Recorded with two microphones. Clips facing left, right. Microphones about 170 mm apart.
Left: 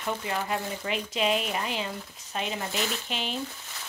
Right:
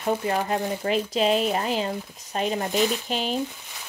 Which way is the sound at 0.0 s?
40° right (ahead or behind).